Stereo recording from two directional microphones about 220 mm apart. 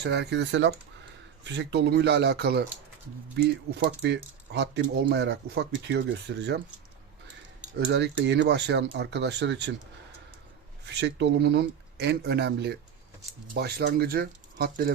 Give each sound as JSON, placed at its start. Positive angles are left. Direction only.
{"t": 0.0, "sound": "speech", "side_deg": -50}
{"t": 7.9, "sound": "speech", "side_deg": -50}
{"t": 11.0, "sound": "speech", "side_deg": -50}